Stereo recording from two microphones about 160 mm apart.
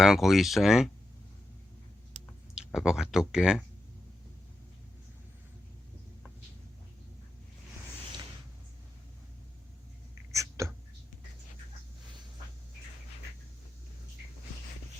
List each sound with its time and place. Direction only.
0.0 s speech: centre (ahead or behind)
2.6 s speech: 5° right (ahead or behind)
10.3 s a sound: 20° right (ahead or behind)